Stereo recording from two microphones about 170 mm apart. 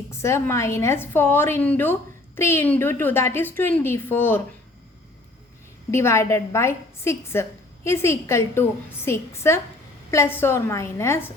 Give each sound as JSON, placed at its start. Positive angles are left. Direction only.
{"t": 0.1, "sound": "a woman's voice", "side_deg": 15}
{"t": 5.9, "sound": "a woman's voice", "side_deg": 15}